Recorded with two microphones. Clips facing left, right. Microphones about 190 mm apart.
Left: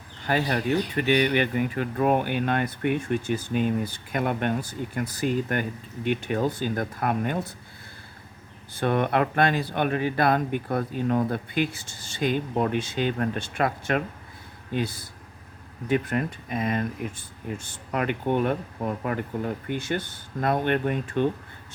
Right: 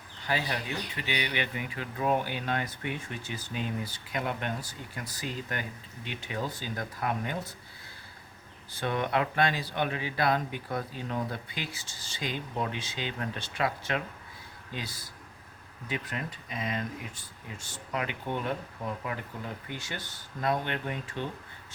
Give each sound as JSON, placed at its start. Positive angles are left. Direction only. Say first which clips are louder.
{"t": 0.3, "sound": "speech", "louder": "left 8 dB", "side_deg": 50}
{"t": 8.7, "sound": "speech", "louder": "left 6 dB", "side_deg": 55}